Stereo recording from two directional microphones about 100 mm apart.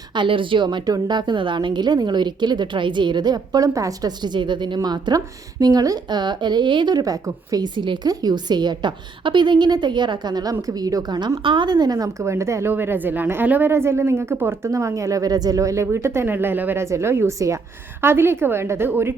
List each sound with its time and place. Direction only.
0.1 s a woman's voice: 55° right (ahead or behind)
11.4 s a woman's voice: 50° right (ahead or behind); by 19.1 s 25° right (ahead or behind)